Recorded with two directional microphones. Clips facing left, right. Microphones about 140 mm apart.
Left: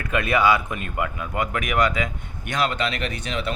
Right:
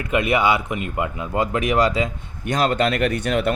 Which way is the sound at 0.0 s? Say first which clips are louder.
Right 2 dB; 20° right (ahead or behind).